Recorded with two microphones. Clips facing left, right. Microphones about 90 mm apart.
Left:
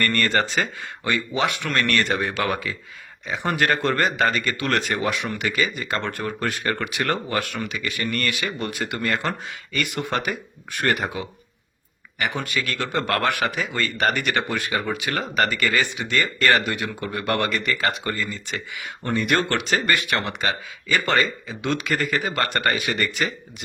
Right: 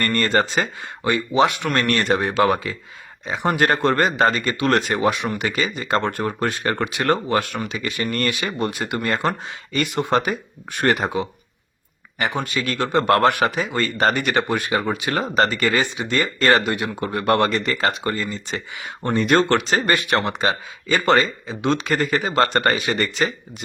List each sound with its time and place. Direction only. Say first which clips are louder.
0.0 s a man's voice: right 2 dB; 20° right (ahead or behind)